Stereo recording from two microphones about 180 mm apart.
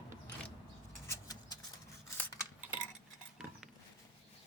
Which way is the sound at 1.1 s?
20° left (ahead or behind).